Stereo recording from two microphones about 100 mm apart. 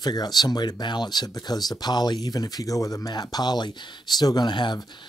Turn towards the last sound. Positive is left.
turn(degrees=50)  # may be behind; listen again after turning